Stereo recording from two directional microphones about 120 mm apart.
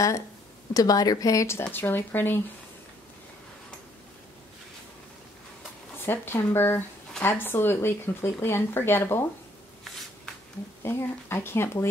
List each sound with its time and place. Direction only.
0.7 s speech: 30° left (ahead or behind)
1.6 s speech: 15° left (ahead or behind)
5.9 s speech: 20° left (ahead or behind)
10.8 s speech: 20° left (ahead or behind)